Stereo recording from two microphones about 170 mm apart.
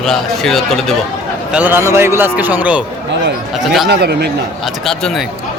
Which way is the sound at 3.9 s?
70° right (ahead or behind).